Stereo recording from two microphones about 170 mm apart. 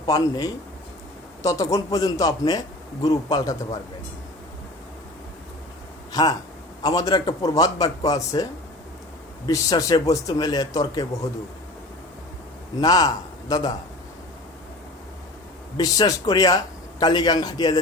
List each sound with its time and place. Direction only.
0.0 s speech: 20° left (ahead or behind)
6.1 s speech: 25° left (ahead or behind)
9.5 s speech: 20° left (ahead or behind)
12.8 s a man's voice: 25° left (ahead or behind)
15.8 s speech: 20° left (ahead or behind)